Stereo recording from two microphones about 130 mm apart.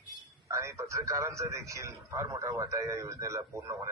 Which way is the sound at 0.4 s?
20° right (ahead or behind).